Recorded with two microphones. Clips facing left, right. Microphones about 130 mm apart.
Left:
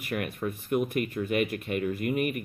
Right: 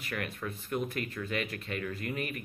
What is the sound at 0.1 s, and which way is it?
Speech, 15° left (ahead or behind).